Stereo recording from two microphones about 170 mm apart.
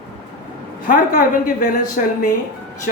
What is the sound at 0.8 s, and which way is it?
Speech, 55° left (ahead or behind).